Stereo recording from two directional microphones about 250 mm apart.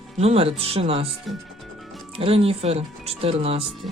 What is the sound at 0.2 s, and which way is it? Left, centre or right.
Speech, right.